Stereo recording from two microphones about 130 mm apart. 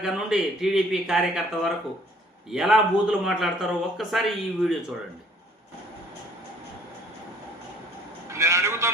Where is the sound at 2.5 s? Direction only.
5° right (ahead or behind).